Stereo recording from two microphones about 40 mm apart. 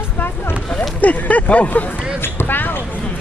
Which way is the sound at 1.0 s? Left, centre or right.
Left.